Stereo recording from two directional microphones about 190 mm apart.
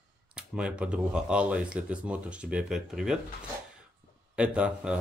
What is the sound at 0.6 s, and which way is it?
Speech, 5° right (ahead or behind).